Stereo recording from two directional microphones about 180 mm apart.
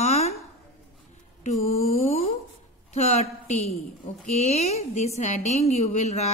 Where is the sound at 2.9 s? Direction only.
40° left (ahead or behind).